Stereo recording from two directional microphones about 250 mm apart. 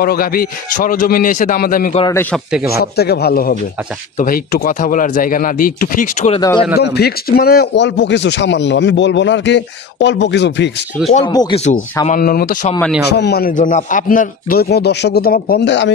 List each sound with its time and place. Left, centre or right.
0.0 s a man's voice: left
2.0 s speech: centre
2.8 s a man's voice: left
6.4 s speech: centre
6.8 s speech: left
11.3 s speech: left
12.1 s a man's voice: left